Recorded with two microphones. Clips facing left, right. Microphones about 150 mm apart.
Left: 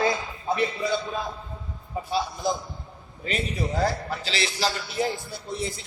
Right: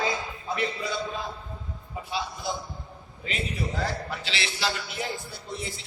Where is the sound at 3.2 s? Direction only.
40° left (ahead or behind).